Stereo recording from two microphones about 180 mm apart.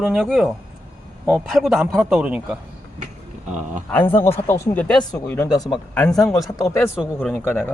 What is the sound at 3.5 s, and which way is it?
Speech, 45° right (ahead or behind).